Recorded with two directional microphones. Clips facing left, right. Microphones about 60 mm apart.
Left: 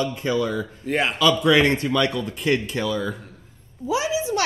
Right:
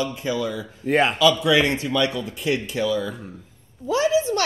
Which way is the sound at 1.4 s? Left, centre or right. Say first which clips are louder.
Left 2 dB; left.